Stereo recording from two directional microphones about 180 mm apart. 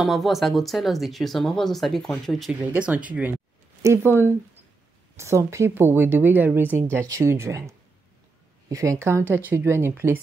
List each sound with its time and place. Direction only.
0.0 s speech: centre (ahead or behind)